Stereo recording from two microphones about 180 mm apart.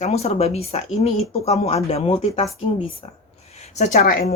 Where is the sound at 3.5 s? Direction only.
35° left (ahead or behind).